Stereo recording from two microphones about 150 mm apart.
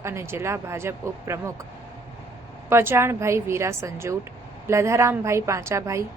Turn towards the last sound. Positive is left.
turn(degrees=-20)  # may be behind; listen again after turning